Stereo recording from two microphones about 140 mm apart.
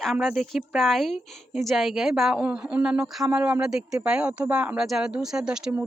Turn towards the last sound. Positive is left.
turn(degrees=-5)  # may be behind; listen again after turning